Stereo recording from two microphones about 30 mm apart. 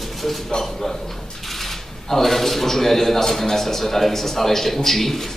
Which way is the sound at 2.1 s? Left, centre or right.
Centre.